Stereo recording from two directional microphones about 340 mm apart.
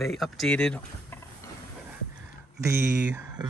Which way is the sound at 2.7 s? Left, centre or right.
Centre.